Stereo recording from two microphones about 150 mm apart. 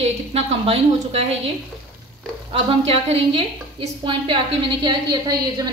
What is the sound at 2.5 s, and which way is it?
A woman's voice, 40° right (ahead or behind).